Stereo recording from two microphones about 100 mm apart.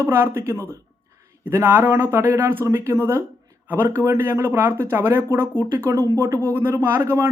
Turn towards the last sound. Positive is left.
turn(degrees=-25)  # may be behind; listen again after turning